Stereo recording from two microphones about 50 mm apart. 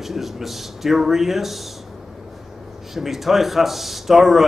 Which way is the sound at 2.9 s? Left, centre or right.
Centre.